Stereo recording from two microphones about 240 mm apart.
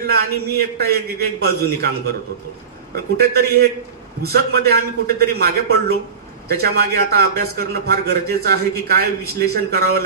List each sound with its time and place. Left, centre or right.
0.0 s a man's voice: right
3.2 s a man's voice: right